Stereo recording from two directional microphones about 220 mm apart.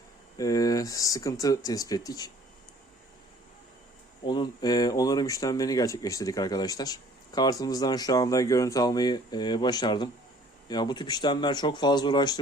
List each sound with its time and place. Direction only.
0.3 s speech: 15° left (ahead or behind)
4.3 s speech: 20° left (ahead or behind)